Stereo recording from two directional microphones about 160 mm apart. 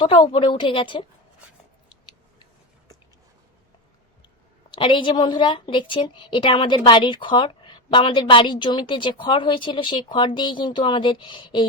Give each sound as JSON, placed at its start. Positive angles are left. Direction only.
{"t": 0.0, "sound": "a woman's voice", "side_deg": 30}
{"t": 4.7, "sound": "a woman's voice", "side_deg": 30}